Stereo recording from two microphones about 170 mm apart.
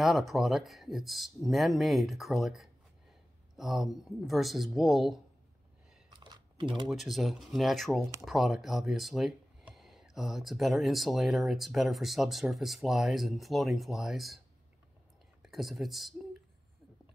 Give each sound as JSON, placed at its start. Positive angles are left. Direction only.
{"t": 0.0, "sound": "speech", "side_deg": 0}
{"t": 6.0, "sound": "a sound", "side_deg": -25}
{"t": 6.9, "sound": "speech", "side_deg": 0}
{"t": 15.4, "sound": "speech", "side_deg": 0}